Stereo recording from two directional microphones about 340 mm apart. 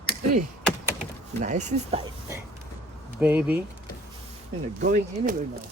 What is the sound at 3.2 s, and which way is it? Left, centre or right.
Speech, centre.